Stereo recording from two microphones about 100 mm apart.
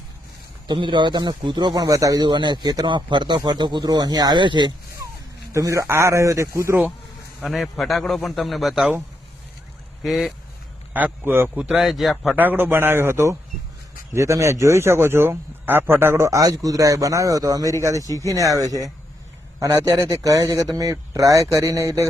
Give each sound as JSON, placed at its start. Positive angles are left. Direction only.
{"t": 0.7, "sound": "speech", "side_deg": -50}
{"t": 1.9, "sound": "speech", "side_deg": -35}
{"t": 5.5, "sound": "speech", "side_deg": -30}
{"t": 7.4, "sound": "a man's voice", "side_deg": 0}
{"t": 10.0, "sound": "a man's voice", "side_deg": 0}
{"t": 10.9, "sound": "speech", "side_deg": -20}
{"t": 11.5, "sound": "a man's voice", "side_deg": -5}
{"t": 12.4, "sound": "speech", "side_deg": -20}